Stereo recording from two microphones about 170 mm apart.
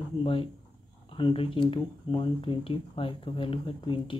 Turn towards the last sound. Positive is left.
turn(degrees=30)  # may be behind; listen again after turning